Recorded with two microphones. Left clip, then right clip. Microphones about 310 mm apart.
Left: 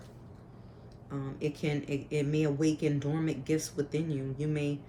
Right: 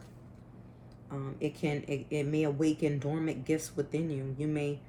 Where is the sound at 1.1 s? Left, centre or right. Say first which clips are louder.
Left 1 dB; centre.